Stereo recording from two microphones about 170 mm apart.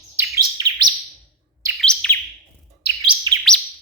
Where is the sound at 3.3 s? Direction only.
25° right (ahead or behind).